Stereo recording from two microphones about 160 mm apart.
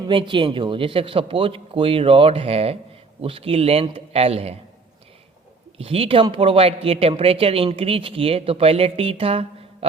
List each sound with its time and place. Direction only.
0.0 s speech: 30° right (ahead or behind)
5.7 s speech: 40° right (ahead or behind)